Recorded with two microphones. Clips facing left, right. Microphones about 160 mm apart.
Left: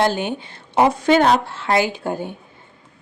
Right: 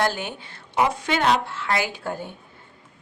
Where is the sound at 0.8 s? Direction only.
35° left (ahead or behind); by 2.3 s 15° left (ahead or behind).